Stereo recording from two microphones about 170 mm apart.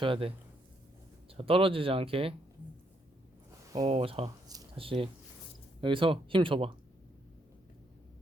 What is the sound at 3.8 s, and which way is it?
Speech, 35° right (ahead or behind).